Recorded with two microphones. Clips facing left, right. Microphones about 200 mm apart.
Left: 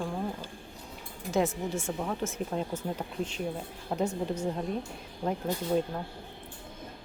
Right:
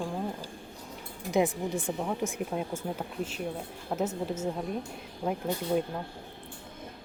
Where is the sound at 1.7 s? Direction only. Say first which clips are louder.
Right 1 dB; 15° right (ahead or behind).